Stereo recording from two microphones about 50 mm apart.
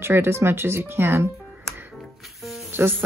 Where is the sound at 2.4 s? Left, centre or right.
Centre.